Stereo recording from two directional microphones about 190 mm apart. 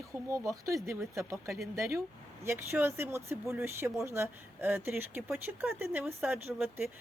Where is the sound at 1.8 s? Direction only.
15° right (ahead or behind).